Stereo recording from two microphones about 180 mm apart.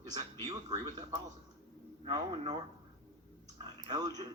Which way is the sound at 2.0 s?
25° right (ahead or behind).